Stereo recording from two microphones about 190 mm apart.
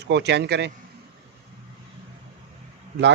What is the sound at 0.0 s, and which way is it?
Speech, 65° right (ahead or behind).